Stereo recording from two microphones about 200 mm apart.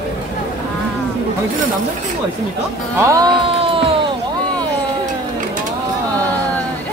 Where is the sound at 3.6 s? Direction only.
25° right (ahead or behind).